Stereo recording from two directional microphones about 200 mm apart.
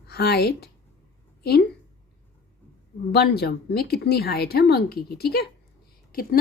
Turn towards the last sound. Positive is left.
turn(degrees=45)  # may be behind; listen again after turning